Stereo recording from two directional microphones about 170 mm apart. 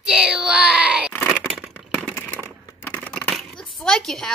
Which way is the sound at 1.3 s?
5° right (ahead or behind).